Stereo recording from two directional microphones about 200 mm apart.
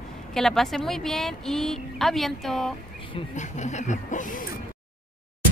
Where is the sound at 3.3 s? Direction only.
35° left (ahead or behind).